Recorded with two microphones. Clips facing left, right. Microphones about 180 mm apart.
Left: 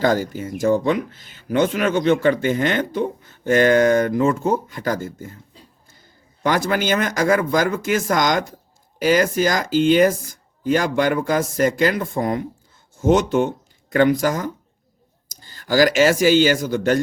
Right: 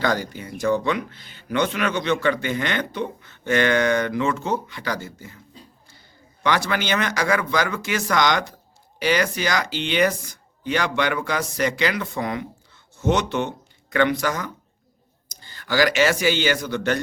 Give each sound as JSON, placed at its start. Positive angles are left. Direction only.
{"t": 0.0, "sound": "speech", "side_deg": 45}
{"t": 6.4, "sound": "speech", "side_deg": 45}